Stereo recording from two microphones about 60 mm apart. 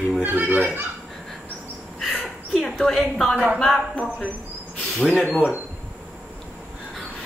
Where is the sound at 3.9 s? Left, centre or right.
Left.